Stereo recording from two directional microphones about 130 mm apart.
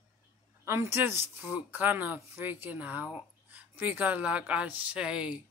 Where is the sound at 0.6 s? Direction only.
20° right (ahead or behind).